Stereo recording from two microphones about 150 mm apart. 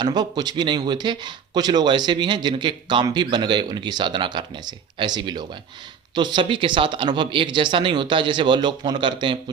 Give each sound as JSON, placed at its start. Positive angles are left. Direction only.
{"t": 0.0, "sound": "speech", "side_deg": -25}